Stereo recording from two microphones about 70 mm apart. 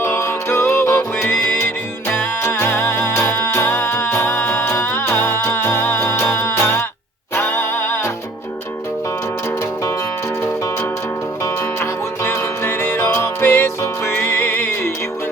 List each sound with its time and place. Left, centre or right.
0.0 s music: left; by 4.6 s centre
4.6 s music: left
11.4 s music: left